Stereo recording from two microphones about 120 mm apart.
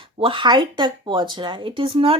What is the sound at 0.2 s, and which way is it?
Speech, 45° right (ahead or behind).